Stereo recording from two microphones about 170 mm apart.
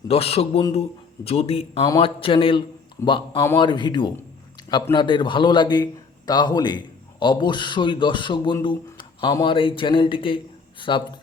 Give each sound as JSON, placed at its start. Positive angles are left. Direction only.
{"t": 0.1, "sound": "a man's voice", "side_deg": 35}